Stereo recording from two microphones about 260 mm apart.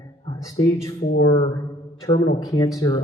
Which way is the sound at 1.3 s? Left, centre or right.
Centre.